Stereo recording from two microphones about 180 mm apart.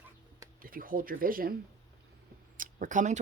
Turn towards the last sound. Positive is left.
turn(degrees=-40)  # may be behind; listen again after turning